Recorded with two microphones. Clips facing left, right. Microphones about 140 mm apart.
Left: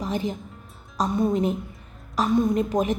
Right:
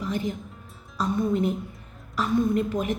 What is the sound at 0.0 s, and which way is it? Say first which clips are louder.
A woman's voice: left 1 dB; 20° left (ahead or behind).